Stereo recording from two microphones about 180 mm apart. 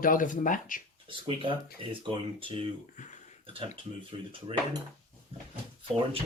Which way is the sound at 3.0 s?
40° left (ahead or behind).